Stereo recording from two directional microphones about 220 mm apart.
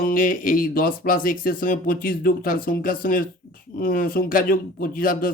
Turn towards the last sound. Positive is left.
turn(degrees=40)  # may be behind; listen again after turning